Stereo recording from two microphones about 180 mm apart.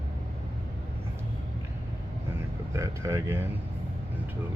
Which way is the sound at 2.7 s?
15° right (ahead or behind).